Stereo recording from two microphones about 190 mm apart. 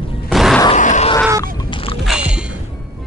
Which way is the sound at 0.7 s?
40° left (ahead or behind).